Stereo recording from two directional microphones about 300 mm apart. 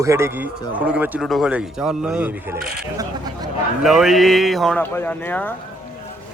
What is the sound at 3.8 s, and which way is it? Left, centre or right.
Speech, centre.